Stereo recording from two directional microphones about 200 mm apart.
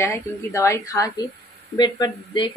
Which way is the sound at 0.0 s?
15° left (ahead or behind).